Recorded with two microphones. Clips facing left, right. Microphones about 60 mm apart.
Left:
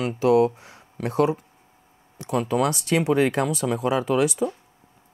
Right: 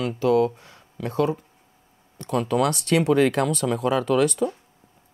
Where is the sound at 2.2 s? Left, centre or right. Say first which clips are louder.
Right 1 dB; centre.